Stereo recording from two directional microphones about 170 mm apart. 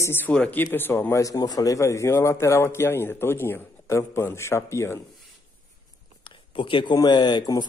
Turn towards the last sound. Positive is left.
turn(degrees=25)  # may be behind; listen again after turning